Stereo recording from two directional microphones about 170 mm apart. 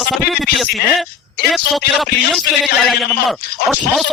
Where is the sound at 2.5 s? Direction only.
65° left (ahead or behind).